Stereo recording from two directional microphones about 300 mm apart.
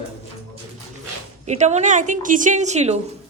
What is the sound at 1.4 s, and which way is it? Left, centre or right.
Speech, right.